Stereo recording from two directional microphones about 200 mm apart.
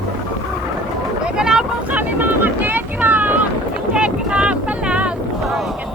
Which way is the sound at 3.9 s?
5° right (ahead or behind).